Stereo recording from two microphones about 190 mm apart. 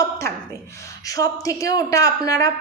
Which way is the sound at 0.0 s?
15° left (ahead or behind).